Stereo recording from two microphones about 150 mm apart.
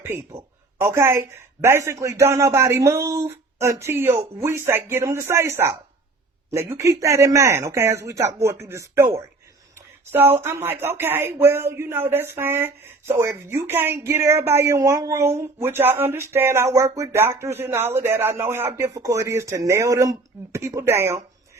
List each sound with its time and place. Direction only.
0.0 s a man's voice: 15° right (ahead or behind)